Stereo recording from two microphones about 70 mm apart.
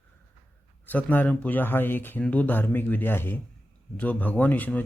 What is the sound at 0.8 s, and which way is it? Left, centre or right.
Speech, left.